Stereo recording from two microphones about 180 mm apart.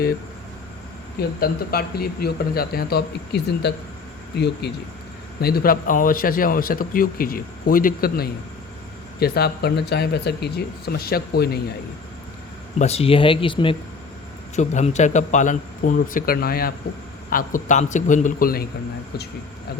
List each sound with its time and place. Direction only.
1.4 s a man's voice: 55° left (ahead or behind)
12.8 s speech: 35° left (ahead or behind)
14.5 s a man's voice: 40° left (ahead or behind)